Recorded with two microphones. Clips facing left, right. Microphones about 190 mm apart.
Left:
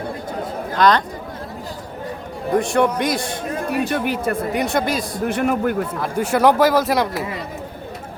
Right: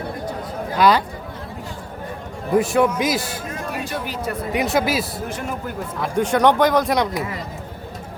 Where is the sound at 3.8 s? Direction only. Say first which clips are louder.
Left 6 dB; 60° left (ahead or behind).